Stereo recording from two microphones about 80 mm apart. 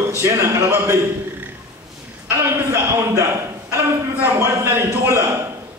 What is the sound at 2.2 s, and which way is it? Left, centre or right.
A man's voice, right.